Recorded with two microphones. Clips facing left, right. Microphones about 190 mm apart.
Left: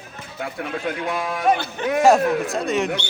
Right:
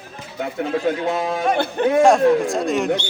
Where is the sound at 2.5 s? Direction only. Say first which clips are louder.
Right 2 dB; centre (ahead or behind).